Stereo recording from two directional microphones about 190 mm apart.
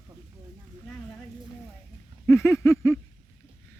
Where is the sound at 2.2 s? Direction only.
15° left (ahead or behind).